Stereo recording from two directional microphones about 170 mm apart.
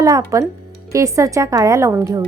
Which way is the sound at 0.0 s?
20° right (ahead or behind).